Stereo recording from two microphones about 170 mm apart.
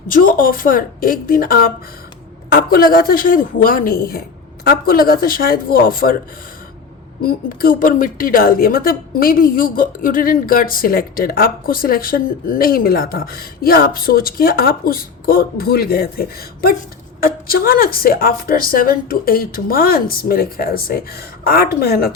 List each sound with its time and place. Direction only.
0.1 s a woman's voice: 55° left (ahead or behind)
7.2 s a woman's voice: 60° left (ahead or behind)